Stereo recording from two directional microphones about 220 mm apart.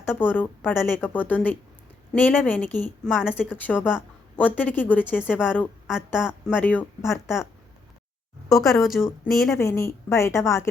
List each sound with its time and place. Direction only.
0.0 s speech: 10° left (ahead or behind)
5.9 s speech: 5° right (ahead or behind)
6.5 s speech: 5° left (ahead or behind)
8.5 s speech: centre (ahead or behind)
9.6 s speech: 15° left (ahead or behind)